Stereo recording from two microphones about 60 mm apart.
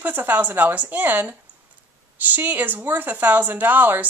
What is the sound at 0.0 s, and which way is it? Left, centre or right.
A woman's voice, right.